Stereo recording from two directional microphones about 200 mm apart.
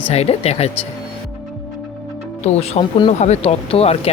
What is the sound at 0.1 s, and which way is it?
Speech, 30° left (ahead or behind).